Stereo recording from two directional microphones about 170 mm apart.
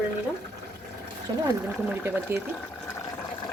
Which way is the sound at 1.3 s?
25° right (ahead or behind).